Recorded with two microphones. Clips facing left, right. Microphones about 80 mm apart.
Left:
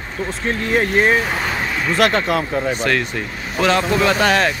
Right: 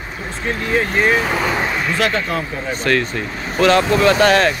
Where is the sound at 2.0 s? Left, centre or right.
Left.